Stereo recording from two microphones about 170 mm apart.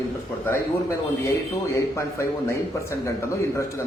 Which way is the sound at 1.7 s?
15° left (ahead or behind).